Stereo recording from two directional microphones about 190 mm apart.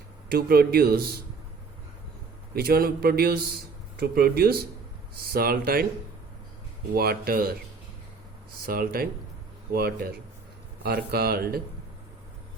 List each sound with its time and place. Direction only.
0.3 s a man's voice: 55° right (ahead or behind)
2.5 s a man's voice: 55° right (ahead or behind)
6.9 s a man's voice: 50° right (ahead or behind)
8.6 s a man's voice: 50° right (ahead or behind)